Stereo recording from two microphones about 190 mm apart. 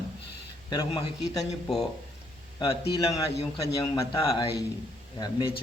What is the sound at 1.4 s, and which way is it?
Speech, centre (ahead or behind).